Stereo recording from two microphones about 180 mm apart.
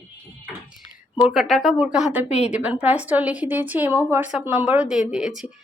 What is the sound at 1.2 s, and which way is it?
A woman's voice, centre (ahead or behind).